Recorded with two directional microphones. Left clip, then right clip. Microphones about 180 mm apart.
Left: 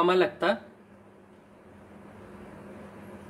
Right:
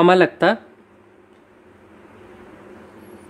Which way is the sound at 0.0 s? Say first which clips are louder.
Right 10 dB; 40° right (ahead or behind).